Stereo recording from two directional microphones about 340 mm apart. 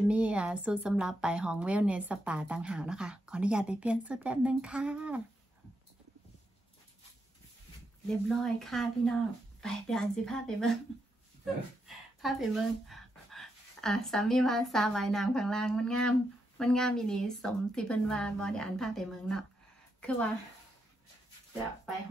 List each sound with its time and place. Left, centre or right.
0.1 s a woman's voice: centre
8.1 s a woman's voice: centre
12.2 s a woman's voice: centre